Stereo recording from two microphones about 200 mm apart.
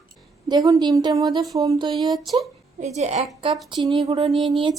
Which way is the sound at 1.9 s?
Centre (ahead or behind).